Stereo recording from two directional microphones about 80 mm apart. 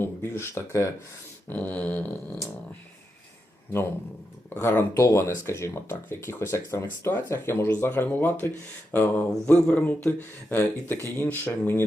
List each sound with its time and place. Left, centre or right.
0.0 s speech: left
1.5 s a sound: centre
3.7 s speech: left